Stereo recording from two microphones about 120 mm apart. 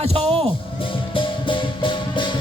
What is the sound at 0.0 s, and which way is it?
Music, 60° right (ahead or behind).